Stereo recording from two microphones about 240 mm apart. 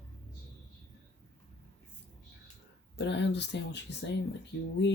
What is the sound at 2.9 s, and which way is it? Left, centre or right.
Speech, left.